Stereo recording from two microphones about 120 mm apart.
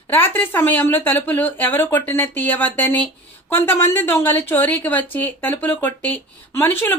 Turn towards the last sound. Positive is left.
turn(degrees=20)  # may be behind; listen again after turning